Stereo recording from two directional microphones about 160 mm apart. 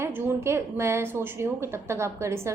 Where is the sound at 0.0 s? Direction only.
15° right (ahead or behind).